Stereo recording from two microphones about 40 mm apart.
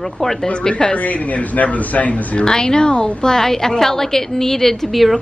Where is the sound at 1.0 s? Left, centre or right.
Left.